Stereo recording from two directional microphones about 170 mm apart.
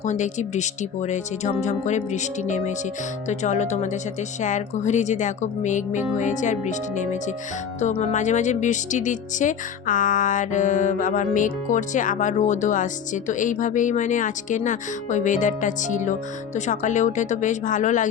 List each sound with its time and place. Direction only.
0.0 s speech: 45° left (ahead or behind)